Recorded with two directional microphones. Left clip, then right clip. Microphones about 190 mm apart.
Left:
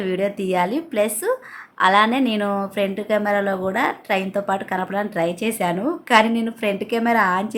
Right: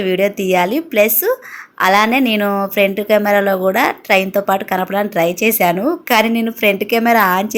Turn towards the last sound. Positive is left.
turn(degrees=-15)  # may be behind; listen again after turning